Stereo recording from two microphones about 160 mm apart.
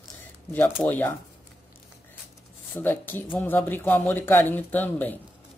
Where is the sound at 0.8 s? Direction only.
10° left (ahead or behind).